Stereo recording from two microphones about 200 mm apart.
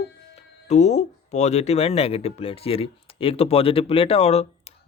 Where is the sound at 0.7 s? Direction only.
35° left (ahead or behind).